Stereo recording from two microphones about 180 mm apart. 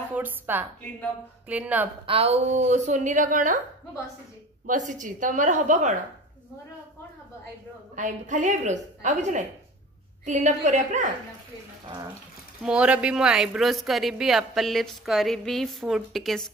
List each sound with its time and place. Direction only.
0.1 s a woman's voice: 10° right (ahead or behind)
2.0 s speech: 35° right (ahead or behind)
4.6 s a woman's voice: 45° right (ahead or behind)
7.9 s a woman's voice: 45° right (ahead or behind)
12.6 s speech: 5° right (ahead or behind)